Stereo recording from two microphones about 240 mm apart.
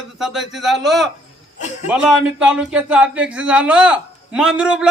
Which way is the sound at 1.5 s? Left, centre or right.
Left.